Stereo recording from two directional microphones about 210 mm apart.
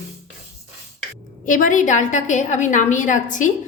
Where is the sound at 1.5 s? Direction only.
40° left (ahead or behind).